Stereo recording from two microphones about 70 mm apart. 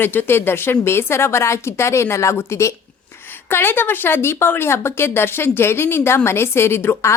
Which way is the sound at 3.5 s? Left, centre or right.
Left.